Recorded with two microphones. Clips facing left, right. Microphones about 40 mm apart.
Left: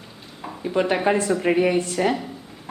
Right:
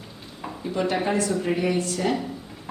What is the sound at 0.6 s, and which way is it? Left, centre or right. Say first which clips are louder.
A woman's voice: left 4 dB; left.